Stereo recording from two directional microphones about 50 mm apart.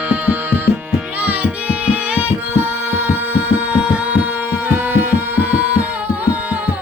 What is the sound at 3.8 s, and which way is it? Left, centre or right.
Music, right.